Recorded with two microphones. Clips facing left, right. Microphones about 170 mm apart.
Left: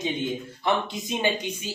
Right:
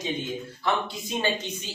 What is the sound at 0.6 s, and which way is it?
Speech, 20° left (ahead or behind).